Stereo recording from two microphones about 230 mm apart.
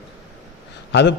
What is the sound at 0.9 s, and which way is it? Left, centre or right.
Speech, left.